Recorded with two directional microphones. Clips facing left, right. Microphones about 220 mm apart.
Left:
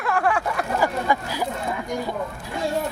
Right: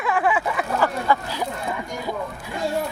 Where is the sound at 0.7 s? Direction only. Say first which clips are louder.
Right 1 dB; 10° left (ahead or behind).